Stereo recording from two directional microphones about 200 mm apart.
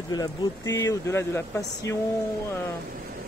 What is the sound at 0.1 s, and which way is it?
Speech, 20° left (ahead or behind).